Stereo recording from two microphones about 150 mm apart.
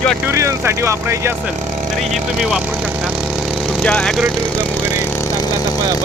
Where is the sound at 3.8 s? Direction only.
5° left (ahead or behind).